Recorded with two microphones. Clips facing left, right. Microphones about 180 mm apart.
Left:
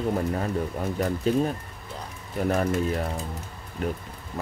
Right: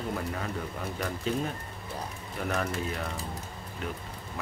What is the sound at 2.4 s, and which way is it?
Speech, 35° left (ahead or behind).